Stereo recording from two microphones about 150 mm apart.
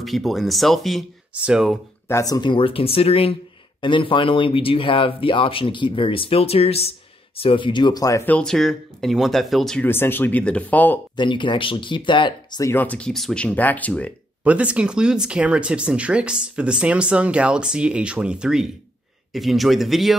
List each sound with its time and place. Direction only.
0.0 s speech: centre (ahead or behind)
2.0 s speech: 20° left (ahead or behind)
8.3 s speech: 5° left (ahead or behind)
9.8 s speech: 15° left (ahead or behind)
11.1 s speech: 30° left (ahead or behind)
12.7 s speech: 10° left (ahead or behind)
14.4 s speech: 10° right (ahead or behind)